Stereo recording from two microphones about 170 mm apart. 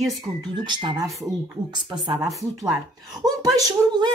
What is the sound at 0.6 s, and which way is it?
Speech, 25° right (ahead or behind).